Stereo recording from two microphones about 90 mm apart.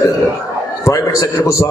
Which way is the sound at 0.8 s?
35° left (ahead or behind).